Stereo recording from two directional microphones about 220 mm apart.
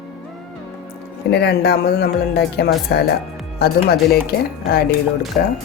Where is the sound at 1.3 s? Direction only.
50° left (ahead or behind).